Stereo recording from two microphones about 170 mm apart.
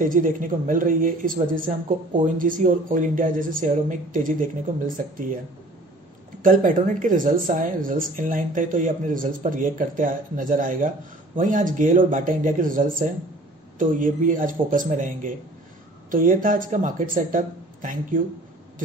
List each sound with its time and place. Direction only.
0.0 s speech: 50° right (ahead or behind)
6.4 s speech: 50° right (ahead or behind)